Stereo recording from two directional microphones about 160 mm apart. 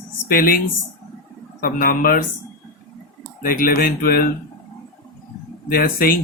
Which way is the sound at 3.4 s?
60° left (ahead or behind).